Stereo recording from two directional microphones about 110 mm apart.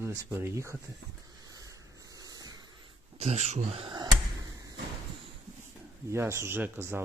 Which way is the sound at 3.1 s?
85° right.